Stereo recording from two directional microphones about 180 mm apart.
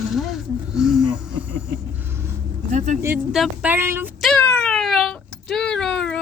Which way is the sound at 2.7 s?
40° right (ahead or behind).